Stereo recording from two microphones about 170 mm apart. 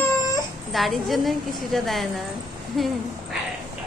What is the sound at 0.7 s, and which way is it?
A woman's voice, centre (ahead or behind).